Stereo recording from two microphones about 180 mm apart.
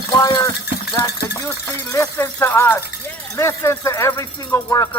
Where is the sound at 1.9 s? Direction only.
15° left (ahead or behind).